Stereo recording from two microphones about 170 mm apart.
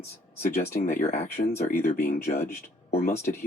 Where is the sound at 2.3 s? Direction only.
15° left (ahead or behind).